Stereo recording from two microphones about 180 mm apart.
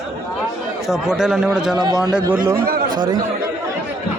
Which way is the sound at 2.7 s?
50° right (ahead or behind).